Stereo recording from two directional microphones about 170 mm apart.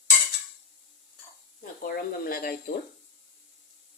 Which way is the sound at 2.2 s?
60° left (ahead or behind).